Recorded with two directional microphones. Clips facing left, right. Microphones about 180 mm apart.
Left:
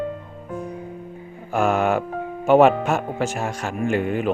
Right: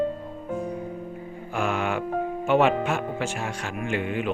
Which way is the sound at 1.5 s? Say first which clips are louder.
Left 7 dB; 45° left (ahead or behind).